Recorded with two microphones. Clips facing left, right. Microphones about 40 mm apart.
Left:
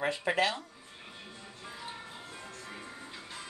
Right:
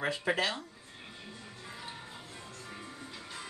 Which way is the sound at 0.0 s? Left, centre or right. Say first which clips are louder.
Even; centre.